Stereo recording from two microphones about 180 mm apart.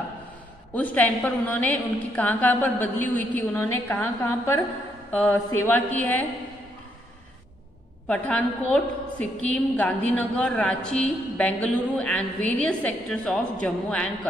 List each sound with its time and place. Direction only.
0.7 s a woman's voice: 10° left (ahead or behind)
8.1 s a woman's voice: 5° left (ahead or behind)